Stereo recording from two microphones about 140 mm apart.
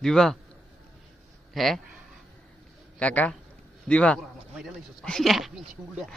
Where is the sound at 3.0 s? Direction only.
10° left (ahead or behind).